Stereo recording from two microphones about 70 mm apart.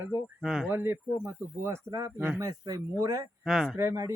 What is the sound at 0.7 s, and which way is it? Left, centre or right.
Speech, right.